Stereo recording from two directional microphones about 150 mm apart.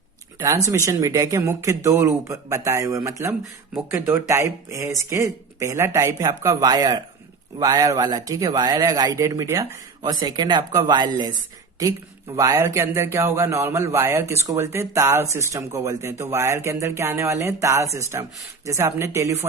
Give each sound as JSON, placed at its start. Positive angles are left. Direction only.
{"t": 0.3, "sound": "speech", "side_deg": -20}
{"t": 12.4, "sound": "speech", "side_deg": -20}